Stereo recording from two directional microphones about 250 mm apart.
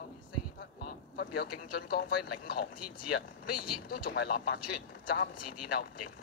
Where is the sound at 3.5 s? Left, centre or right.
Left.